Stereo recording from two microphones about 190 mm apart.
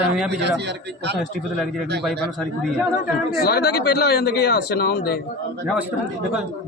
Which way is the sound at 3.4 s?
55° left (ahead or behind).